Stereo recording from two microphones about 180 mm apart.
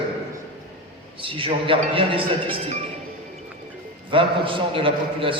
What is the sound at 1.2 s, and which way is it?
A man's voice, 30° right (ahead or behind).